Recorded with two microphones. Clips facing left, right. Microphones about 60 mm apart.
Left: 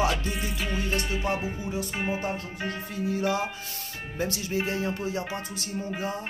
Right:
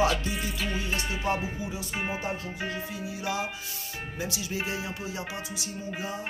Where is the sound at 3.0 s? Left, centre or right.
Left.